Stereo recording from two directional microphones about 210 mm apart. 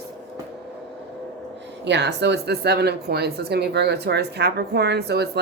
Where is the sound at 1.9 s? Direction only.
55° right (ahead or behind).